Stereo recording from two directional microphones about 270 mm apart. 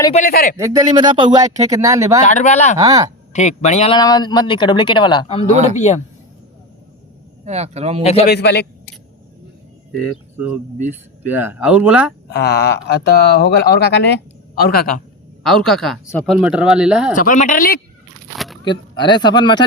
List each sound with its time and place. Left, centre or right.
0.0 s speech: left
0.5 s speech: centre
2.2 s speech: left
2.7 s speech: centre
3.3 s speech: left
7.4 s speech: right
8.0 s speech: left
8.3 s speech: left
10.3 s speech: centre
12.3 s speech: left
15.4 s speech: centre
17.3 s speech: left
18.3 s a sound: centre
18.6 s speech: centre